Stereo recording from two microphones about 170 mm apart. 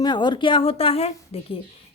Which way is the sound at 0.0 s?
25° left (ahead or behind).